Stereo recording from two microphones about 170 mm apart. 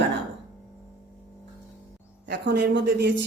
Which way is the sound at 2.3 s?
90° right.